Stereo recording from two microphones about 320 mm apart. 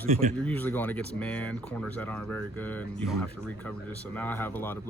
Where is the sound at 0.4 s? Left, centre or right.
Centre.